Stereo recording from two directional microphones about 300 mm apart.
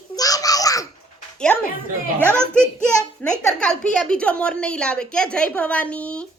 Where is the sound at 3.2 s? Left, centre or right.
Centre.